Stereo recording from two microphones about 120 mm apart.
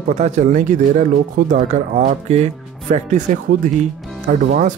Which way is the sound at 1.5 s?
75° right (ahead or behind).